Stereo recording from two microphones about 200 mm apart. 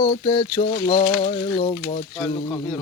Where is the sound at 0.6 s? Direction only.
35° left (ahead or behind).